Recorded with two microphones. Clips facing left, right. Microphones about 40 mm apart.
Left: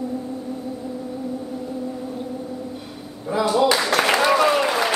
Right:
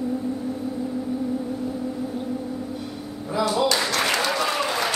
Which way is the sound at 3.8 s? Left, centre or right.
Left.